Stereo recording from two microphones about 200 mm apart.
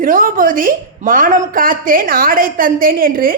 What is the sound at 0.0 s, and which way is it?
A woman's voice, 45° right (ahead or behind).